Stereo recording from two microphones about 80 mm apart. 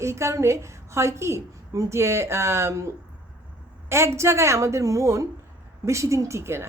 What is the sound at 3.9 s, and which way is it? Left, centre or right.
A woman's voice, right.